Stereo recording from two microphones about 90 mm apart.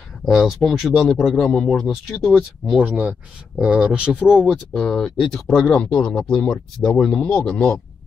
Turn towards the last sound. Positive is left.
turn(degrees=10)  # may be behind; listen again after turning